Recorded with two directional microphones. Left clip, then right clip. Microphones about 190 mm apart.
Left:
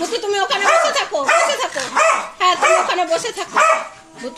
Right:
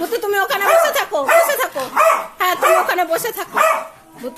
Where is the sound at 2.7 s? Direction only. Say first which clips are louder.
Right 1 dB; 15° right (ahead or behind).